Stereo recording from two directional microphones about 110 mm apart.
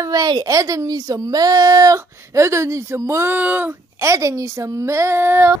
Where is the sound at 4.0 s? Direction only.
30° right (ahead or behind).